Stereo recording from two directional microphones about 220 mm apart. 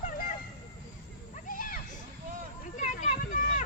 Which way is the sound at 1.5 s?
40° left (ahead or behind).